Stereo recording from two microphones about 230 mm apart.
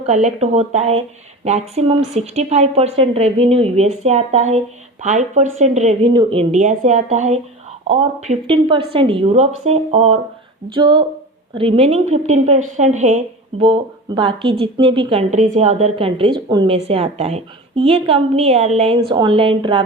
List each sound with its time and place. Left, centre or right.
0.0 s speech: right